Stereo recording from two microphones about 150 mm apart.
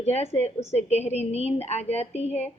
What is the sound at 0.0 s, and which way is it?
Speech, 45° left (ahead or behind).